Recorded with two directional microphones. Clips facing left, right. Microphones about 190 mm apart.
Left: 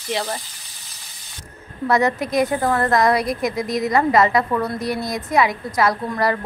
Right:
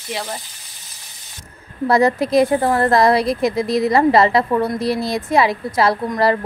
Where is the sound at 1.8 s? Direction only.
30° right (ahead or behind).